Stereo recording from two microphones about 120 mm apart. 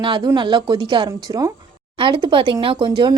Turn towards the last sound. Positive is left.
turn(degrees=-40)  # may be behind; listen again after turning